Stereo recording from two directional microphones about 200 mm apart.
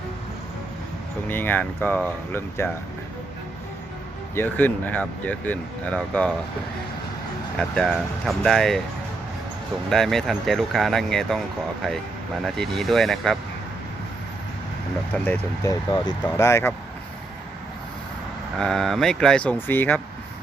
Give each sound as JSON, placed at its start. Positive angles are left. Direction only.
{"t": 1.3, "sound": "speech", "side_deg": 10}
{"t": 4.4, "sound": "speech", "side_deg": 10}
{"t": 7.6, "sound": "speech", "side_deg": 0}
{"t": 9.9, "sound": "speech", "side_deg": 0}
{"t": 15.1, "sound": "speech", "side_deg": 10}
{"t": 18.5, "sound": "speech", "side_deg": 5}